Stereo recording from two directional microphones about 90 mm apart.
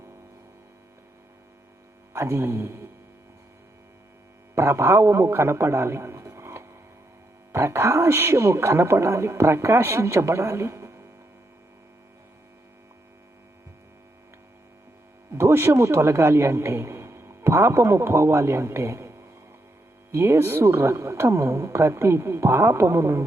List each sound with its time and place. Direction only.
2.1 s a woman's voice: 30° right (ahead or behind)
4.5 s a man's voice: 30° right (ahead or behind)
15.3 s a man's voice: 30° right (ahead or behind)